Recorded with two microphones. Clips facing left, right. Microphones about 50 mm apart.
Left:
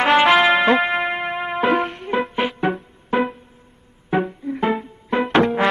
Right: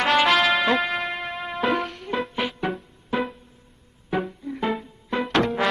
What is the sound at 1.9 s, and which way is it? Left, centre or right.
Music, centre.